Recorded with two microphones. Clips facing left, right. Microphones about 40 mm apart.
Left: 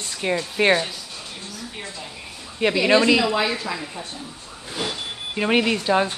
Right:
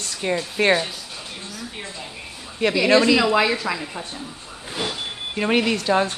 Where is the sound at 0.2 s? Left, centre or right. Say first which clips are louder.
Even; centre.